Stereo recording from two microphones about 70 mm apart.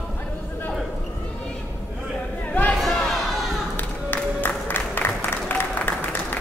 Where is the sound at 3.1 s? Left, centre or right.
Centre.